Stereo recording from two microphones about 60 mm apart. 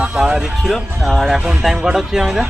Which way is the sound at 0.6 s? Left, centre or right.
Centre.